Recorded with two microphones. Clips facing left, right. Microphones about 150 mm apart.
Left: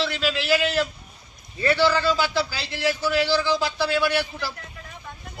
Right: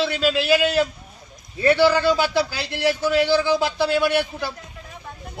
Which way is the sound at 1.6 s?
15° right (ahead or behind).